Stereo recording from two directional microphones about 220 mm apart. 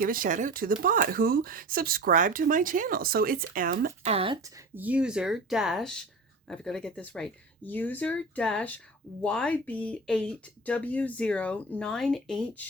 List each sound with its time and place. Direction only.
0.0 s speech: 40° right (ahead or behind)
4.1 s speech: 25° right (ahead or behind); by 12.6 s centre (ahead or behind)